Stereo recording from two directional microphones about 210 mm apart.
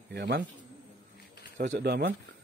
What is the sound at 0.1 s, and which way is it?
Speech, 60° right (ahead or behind).